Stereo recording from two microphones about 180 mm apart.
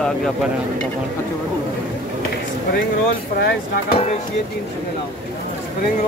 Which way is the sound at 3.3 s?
65° left (ahead or behind).